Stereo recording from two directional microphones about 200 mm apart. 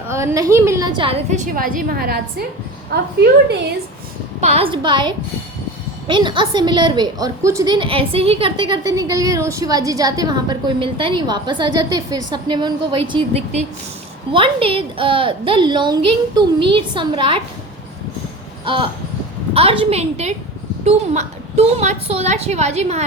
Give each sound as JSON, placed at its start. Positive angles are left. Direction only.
{"t": 0.1, "sound": "a woman's voice", "side_deg": -15}
{"t": 1.3, "sound": "a woman's voice", "side_deg": -45}
{"t": 4.4, "sound": "a woman's voice", "side_deg": -30}
{"t": 14.3, "sound": "a woman's voice", "side_deg": -25}
{"t": 18.6, "sound": "a sound", "side_deg": -25}
{"t": 19.5, "sound": "a woman's voice", "side_deg": -25}